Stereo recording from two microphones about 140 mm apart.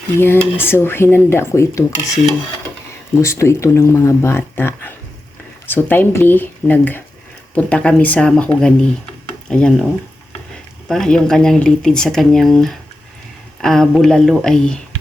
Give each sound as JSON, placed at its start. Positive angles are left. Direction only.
{"t": 0.2, "sound": "speech", "side_deg": 15}
{"t": 3.2, "sound": "speech", "side_deg": 20}
{"t": 10.8, "sound": "speech", "side_deg": 5}